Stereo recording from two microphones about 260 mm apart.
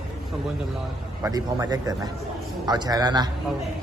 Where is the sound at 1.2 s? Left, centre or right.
Centre.